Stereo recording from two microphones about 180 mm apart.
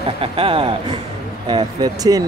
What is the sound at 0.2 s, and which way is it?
Speech, 30° right (ahead or behind).